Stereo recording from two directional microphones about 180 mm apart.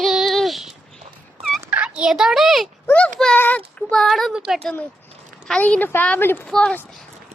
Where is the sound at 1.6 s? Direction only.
10° right (ahead or behind).